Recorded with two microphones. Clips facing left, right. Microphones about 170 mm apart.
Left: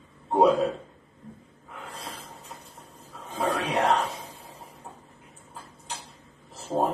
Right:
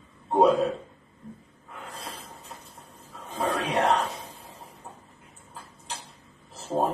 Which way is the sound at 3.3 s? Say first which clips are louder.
Even; centre (ahead or behind).